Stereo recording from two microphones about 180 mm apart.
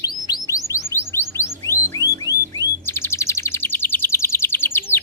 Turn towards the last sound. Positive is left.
turn(degrees=10)  # may be behind; listen again after turning